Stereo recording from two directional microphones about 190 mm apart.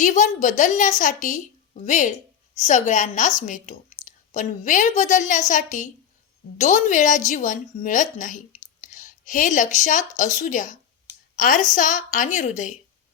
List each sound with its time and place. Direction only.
0.0 s a woman's voice: 40° left (ahead or behind)